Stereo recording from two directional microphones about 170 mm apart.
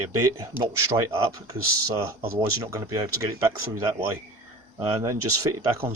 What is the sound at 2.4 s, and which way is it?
Speech, 20° right (ahead or behind).